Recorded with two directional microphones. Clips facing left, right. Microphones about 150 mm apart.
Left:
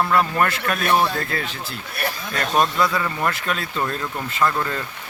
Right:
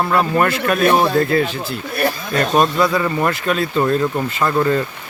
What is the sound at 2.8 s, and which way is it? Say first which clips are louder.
Speech: right 5 dB; 20° right (ahead or behind).